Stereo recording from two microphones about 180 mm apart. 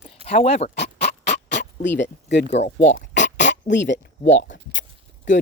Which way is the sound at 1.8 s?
80° left.